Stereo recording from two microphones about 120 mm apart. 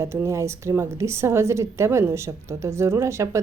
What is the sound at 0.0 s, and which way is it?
A woman's voice, 25° right (ahead or behind).